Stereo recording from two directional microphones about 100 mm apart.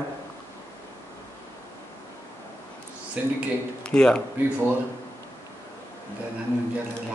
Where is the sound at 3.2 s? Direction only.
10° right (ahead or behind).